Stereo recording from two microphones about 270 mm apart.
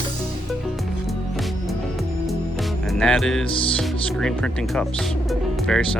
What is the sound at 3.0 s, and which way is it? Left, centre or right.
Speech, centre.